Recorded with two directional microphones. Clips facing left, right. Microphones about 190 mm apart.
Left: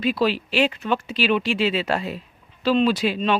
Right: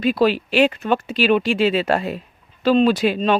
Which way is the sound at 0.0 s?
50° right (ahead or behind).